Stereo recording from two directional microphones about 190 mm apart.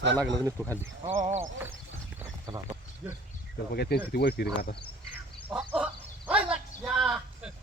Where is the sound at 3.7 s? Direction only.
55° left (ahead or behind).